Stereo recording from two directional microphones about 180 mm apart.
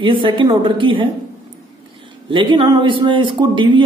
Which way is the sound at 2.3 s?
25° right (ahead or behind).